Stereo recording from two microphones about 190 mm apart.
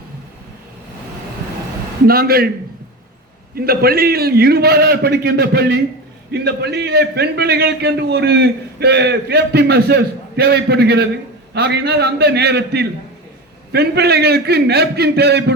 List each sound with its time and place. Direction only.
2.0 s a man's voice: 55° right (ahead or behind)
3.5 s a man's voice: 55° right (ahead or behind)